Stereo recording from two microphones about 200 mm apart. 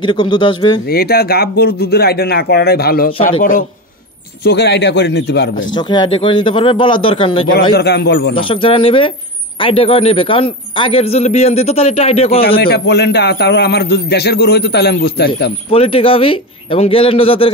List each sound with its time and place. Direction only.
0.0 s a man's voice: 25° left (ahead or behind)
0.8 s speech: 50° left (ahead or behind)
4.4 s a man's voice: 55° left (ahead or behind)
5.8 s a man's voice: 20° left (ahead or behind)
7.7 s speech: 50° left (ahead or behind)
8.4 s a man's voice: 25° left (ahead or behind)
12.5 s a man's voice: 50° left (ahead or behind)
15.7 s a man's voice: 30° left (ahead or behind)